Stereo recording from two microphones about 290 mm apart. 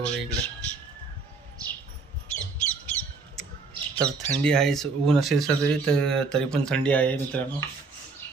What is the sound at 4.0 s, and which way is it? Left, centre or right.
Speech, centre.